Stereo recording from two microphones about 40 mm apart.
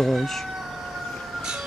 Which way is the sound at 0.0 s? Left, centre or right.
Centre.